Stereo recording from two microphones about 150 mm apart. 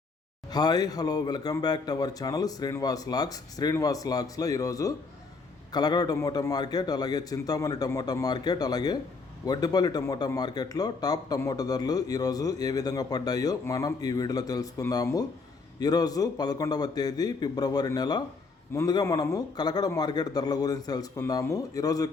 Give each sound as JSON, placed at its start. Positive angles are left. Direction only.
{"t": 0.5, "sound": "speech", "side_deg": 25}